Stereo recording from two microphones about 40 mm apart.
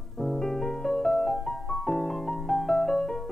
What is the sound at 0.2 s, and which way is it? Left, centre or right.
Music, centre.